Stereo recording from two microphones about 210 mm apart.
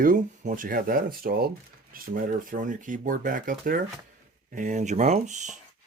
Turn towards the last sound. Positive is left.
turn(degrees=-35)  # may be behind; listen again after turning